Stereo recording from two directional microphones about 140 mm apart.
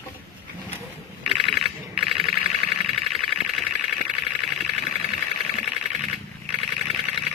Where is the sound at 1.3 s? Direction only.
Centre (ahead or behind).